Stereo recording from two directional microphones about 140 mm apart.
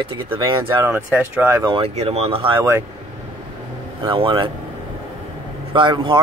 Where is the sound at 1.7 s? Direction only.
40° right (ahead or behind).